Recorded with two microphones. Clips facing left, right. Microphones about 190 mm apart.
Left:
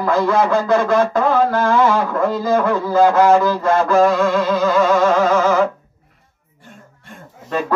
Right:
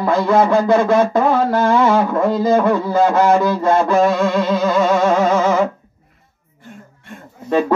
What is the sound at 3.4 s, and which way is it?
Speech, 20° right (ahead or behind).